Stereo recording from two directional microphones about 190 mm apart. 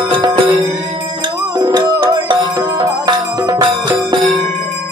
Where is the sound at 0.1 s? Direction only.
30° right (ahead or behind).